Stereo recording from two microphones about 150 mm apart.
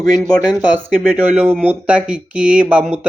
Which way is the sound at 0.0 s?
Centre (ahead or behind).